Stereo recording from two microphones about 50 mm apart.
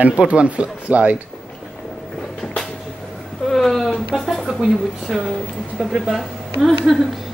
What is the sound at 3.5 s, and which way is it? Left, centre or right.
A woman's voice, centre.